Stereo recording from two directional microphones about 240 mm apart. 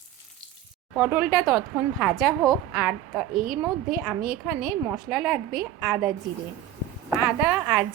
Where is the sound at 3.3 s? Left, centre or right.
Right.